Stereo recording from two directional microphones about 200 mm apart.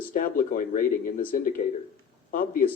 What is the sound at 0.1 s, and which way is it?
A man's voice, 40° left (ahead or behind).